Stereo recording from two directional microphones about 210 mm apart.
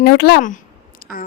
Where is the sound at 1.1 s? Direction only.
5° right (ahead or behind).